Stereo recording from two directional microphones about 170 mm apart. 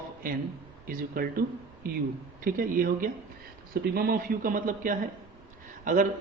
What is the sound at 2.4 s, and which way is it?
A man's voice, 55° right (ahead or behind).